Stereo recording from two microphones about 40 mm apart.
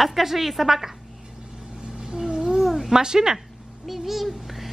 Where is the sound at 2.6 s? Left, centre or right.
Centre.